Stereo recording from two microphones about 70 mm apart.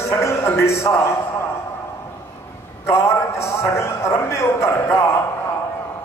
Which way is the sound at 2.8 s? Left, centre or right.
Left.